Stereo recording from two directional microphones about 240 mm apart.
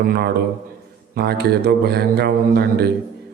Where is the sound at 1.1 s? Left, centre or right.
Right.